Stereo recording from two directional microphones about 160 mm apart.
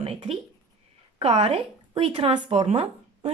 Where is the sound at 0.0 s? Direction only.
35° right (ahead or behind).